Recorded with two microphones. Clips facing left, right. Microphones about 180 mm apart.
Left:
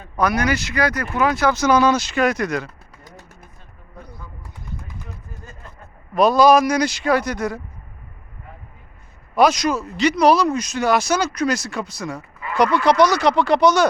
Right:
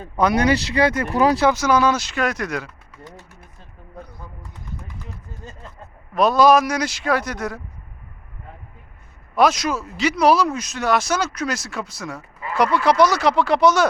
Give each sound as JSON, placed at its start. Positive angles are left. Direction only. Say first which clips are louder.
{"t": 0.0, "sound": "speech", "louder": "right 2 dB", "side_deg": -25}
{"t": 1.5, "sound": "speech", "louder": "left 1 dB", "side_deg": -10}
{"t": 6.1, "sound": "speech", "louder": "left 1 dB", "side_deg": 0}
{"t": 9.3, "sound": "speech", "louder": "left 2 dB", "side_deg": 0}